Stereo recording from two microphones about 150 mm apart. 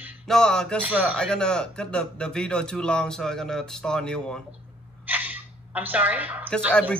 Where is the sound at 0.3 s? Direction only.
5° left (ahead or behind).